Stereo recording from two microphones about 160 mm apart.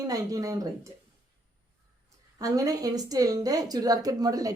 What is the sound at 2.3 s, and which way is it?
A woman's voice, 25° right (ahead or behind).